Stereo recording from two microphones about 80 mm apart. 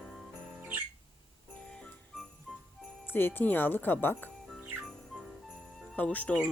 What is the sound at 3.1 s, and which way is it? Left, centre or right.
Speech, left.